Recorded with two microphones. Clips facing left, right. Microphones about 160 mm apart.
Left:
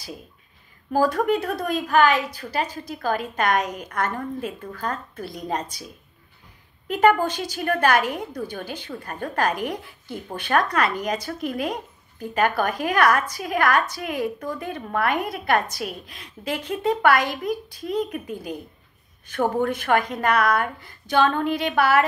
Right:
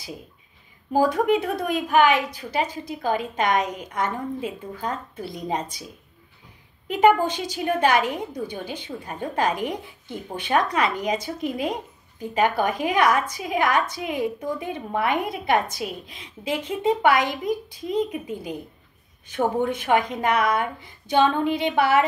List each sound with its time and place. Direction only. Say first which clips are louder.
0.9 s a woman's voice: right 1 dB; 15° right (ahead or behind)
6.9 s a woman's voice: right 1 dB; 15° right (ahead or behind)